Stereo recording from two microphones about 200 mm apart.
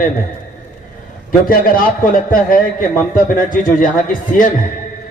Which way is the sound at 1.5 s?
45° left (ahead or behind).